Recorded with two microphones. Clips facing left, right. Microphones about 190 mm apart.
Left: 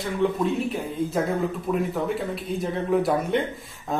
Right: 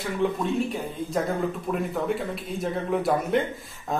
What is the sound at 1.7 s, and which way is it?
Speech, centre (ahead or behind).